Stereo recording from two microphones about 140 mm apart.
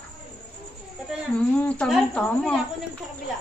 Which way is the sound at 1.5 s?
10° left (ahead or behind).